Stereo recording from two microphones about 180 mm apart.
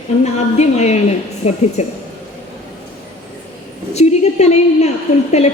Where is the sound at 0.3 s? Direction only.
40° left (ahead or behind).